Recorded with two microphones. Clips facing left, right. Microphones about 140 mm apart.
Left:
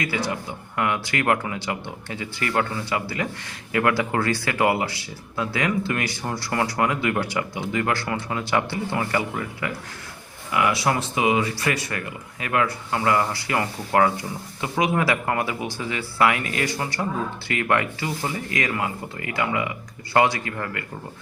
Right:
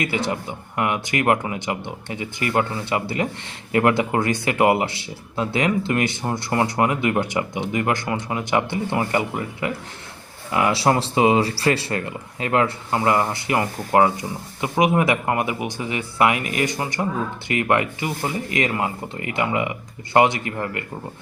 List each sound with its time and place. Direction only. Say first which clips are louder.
0.0 s speech: right 3 dB; 25° right (ahead or behind)